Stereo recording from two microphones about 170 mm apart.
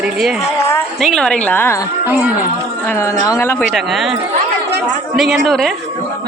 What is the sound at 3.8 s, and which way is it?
Speech, centre (ahead or behind).